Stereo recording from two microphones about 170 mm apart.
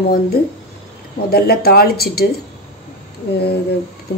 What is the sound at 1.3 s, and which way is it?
Speech, 65° left (ahead or behind).